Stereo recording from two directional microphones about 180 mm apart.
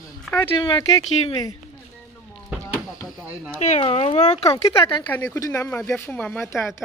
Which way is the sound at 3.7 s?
35° left (ahead or behind).